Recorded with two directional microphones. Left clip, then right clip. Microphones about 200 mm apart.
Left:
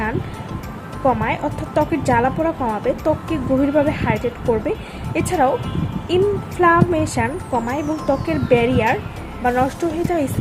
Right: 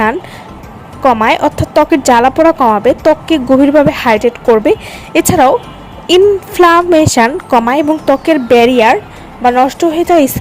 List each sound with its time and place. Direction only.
1.0 s speech: 50° right (ahead or behind)